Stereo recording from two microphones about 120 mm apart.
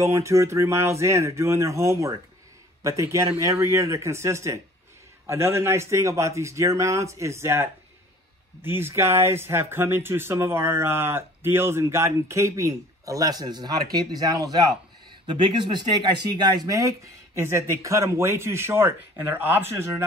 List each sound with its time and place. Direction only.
0.0 s speech: 25° right (ahead or behind)